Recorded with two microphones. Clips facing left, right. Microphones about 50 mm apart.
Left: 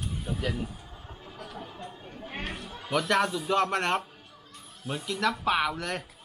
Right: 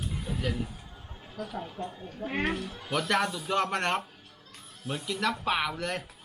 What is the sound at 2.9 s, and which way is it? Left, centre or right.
Speech, centre.